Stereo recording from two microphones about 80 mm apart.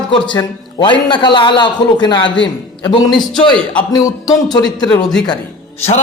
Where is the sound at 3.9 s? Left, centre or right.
Left.